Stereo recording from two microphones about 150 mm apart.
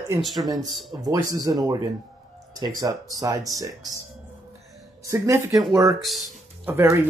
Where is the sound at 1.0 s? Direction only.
25° right (ahead or behind).